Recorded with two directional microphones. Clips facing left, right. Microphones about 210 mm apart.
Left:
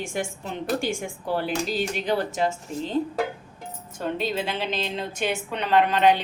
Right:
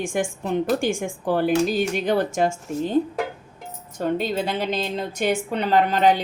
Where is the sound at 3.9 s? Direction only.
45° right (ahead or behind).